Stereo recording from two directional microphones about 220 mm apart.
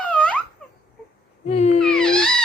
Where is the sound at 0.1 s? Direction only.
5° left (ahead or behind).